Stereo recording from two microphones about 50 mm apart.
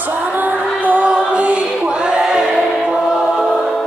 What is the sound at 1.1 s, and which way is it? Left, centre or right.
Choir, right.